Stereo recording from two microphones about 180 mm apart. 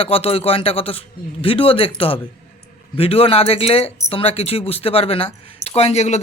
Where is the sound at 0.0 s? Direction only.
30° left (ahead or behind).